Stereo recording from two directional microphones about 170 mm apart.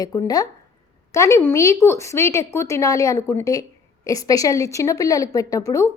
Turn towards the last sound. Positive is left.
turn(degrees=20)  # may be behind; listen again after turning